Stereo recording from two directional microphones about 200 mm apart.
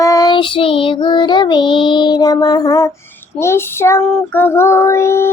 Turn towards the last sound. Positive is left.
turn(degrees=15)  # may be behind; listen again after turning